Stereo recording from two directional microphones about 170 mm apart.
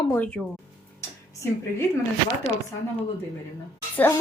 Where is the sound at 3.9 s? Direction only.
15° left (ahead or behind).